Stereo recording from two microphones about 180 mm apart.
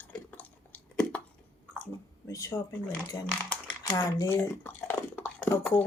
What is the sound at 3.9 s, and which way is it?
Computer keyboard, 20° left (ahead or behind).